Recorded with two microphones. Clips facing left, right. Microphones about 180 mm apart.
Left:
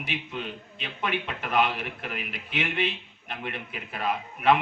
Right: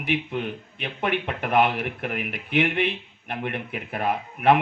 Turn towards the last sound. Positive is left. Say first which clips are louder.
# right 3 dB
turn(degrees=-55)  # may be behind; listen again after turning